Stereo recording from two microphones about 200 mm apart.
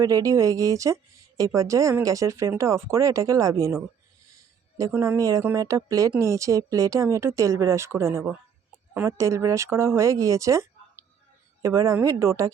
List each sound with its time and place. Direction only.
0.0 s speech: 15° right (ahead or behind)
4.8 s speech: 15° right (ahead or behind)